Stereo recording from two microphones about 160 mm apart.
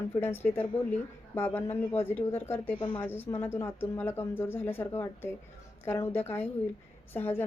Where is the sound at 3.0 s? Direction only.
15° left (ahead or behind).